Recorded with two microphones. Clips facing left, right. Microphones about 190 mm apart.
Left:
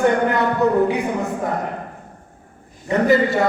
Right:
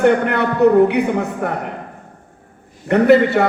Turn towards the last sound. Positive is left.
turn(degrees=-65)  # may be behind; listen again after turning